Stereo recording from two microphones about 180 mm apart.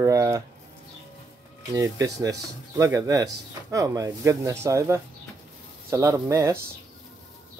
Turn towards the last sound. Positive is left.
turn(degrees=-15)  # may be behind; listen again after turning